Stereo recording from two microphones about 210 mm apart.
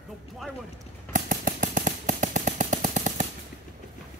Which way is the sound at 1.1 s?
40° right (ahead or behind).